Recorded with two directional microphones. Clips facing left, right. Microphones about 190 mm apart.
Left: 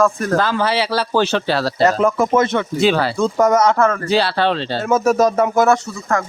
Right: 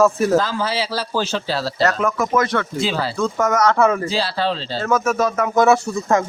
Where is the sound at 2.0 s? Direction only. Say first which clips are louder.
Left 4 dB; 30° left (ahead or behind).